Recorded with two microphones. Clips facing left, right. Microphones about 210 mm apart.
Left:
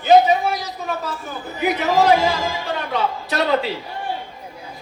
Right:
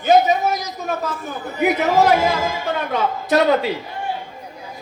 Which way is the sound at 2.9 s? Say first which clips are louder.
Right 6 dB; 50° right (ahead or behind).